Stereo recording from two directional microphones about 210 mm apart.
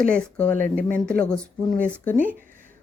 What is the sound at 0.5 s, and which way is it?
Speech, 40° right (ahead or behind).